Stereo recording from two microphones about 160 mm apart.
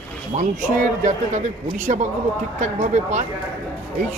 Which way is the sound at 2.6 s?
50° right (ahead or behind).